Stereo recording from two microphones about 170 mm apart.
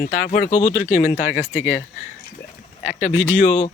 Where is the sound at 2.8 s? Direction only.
45° left (ahead or behind).